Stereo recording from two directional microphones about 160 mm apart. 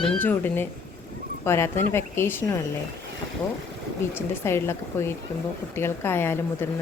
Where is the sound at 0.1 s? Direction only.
10° left (ahead or behind).